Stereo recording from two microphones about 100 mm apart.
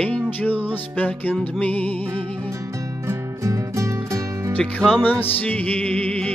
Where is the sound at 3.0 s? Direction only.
30° right (ahead or behind).